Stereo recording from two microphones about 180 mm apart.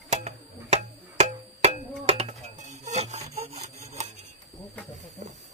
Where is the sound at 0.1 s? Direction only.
40° right (ahead or behind).